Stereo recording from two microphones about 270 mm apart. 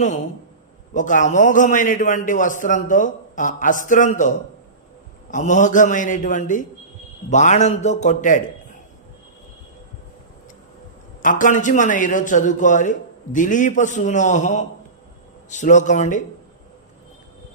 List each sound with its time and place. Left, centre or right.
0.9 s a man's voice: left
5.3 s a man's voice: left
11.2 s a man's voice: left